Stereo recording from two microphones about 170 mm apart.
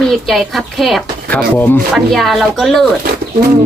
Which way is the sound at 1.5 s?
10° left (ahead or behind).